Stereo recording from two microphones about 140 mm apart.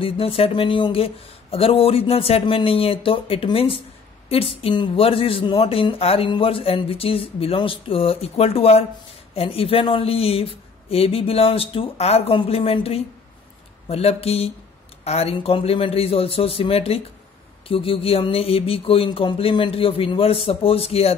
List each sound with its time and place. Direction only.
0.0 s speech: 40° left (ahead or behind)